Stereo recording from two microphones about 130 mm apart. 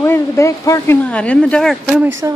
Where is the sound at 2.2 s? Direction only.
20° right (ahead or behind).